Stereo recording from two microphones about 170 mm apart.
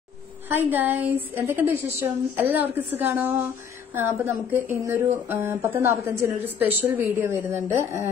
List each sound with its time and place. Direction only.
0.5 s speech: 10° right (ahead or behind)